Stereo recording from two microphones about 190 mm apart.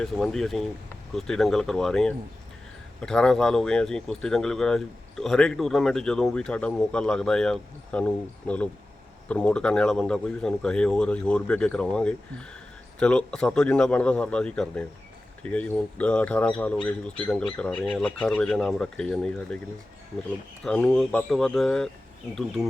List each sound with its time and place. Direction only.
0.0 s speech: centre (ahead or behind)
20.7 s speech: 5° left (ahead or behind)